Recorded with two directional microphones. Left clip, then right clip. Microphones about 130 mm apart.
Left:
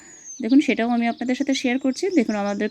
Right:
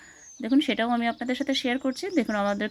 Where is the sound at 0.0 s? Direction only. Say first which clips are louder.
Left 3 dB; 45° left (ahead or behind).